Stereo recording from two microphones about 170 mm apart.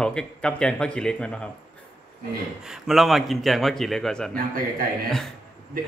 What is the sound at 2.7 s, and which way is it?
A man's voice, centre (ahead or behind).